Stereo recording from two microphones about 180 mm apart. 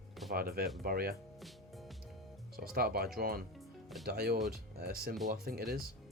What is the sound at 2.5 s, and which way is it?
Speech, 55° right (ahead or behind).